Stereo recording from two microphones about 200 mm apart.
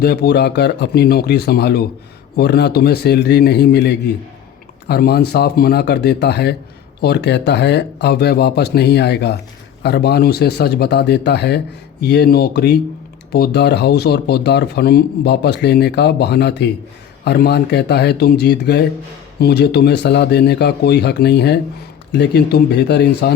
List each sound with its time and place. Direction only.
0.0 s speech: 55° left (ahead or behind)